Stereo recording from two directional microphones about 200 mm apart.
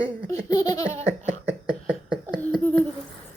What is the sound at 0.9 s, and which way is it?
Laughter, 35° right (ahead or behind).